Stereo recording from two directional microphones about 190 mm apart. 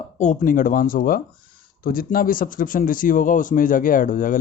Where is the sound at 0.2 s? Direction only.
40° left (ahead or behind).